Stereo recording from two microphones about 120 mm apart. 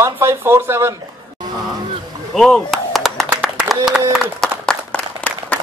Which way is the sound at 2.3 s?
5° left (ahead or behind).